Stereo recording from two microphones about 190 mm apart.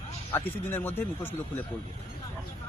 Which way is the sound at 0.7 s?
10° left (ahead or behind).